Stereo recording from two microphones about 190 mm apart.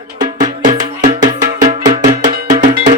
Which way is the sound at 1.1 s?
20° right (ahead or behind).